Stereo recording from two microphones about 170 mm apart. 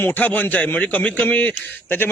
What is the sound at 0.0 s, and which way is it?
A man's voice, 10° left (ahead or behind).